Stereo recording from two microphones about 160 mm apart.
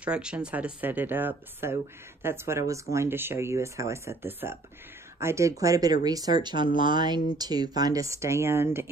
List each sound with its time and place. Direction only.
0.0 s speech: 5° right (ahead or behind)